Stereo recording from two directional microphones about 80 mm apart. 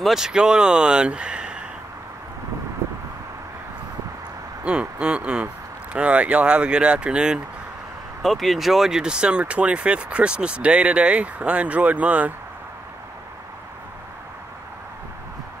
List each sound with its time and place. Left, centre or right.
0.0 s speech: centre
2.8 s a sound: right
4.6 s speech: centre
8.2 s speech: centre